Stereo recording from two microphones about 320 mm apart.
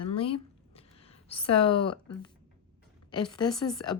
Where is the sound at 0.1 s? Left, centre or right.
Centre.